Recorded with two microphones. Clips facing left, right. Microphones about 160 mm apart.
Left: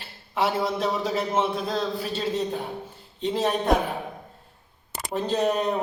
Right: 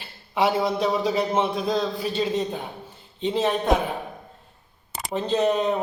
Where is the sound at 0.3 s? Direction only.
5° left (ahead or behind).